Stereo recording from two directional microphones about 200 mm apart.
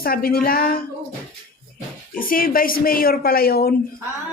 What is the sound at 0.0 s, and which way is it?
Speech, 50° left (ahead or behind).